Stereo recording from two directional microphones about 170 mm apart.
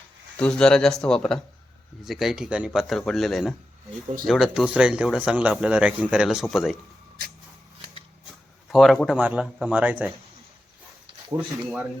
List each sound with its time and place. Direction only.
0.3 s speech: 5° left (ahead or behind)
8.7 s speech: centre (ahead or behind)
11.3 s speech: 5° right (ahead or behind)